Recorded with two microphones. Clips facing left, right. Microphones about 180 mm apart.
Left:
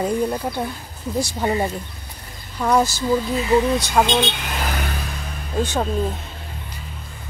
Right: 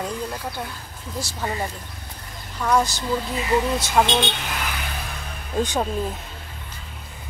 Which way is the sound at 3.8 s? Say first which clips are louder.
Left 1 dB; 5° right (ahead or behind).